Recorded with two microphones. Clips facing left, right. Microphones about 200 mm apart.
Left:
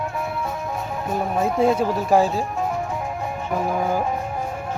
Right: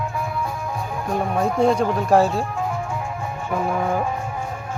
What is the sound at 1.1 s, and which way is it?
Speech, 5° left (ahead or behind).